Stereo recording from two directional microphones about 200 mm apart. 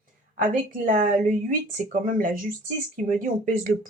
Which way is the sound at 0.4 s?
40° right (ahead or behind).